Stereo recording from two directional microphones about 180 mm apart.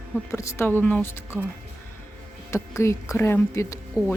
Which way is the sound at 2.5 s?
15° left (ahead or behind).